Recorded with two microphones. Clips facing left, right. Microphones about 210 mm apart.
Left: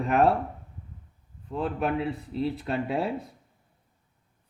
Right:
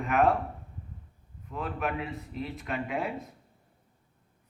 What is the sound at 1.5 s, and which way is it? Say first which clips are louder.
Speech: left 5 dB; 30° left (ahead or behind).